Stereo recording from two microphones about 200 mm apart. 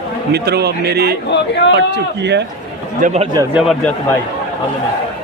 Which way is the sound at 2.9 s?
35° right (ahead or behind).